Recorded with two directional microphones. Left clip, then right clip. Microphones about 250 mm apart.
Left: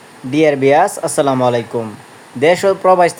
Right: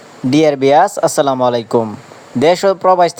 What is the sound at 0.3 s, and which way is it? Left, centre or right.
Speech, right.